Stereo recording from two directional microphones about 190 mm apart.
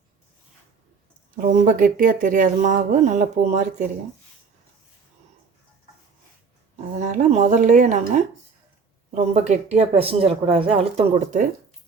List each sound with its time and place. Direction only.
1.4 s speech: 45° right (ahead or behind)
7.0 s speech: 40° right (ahead or behind)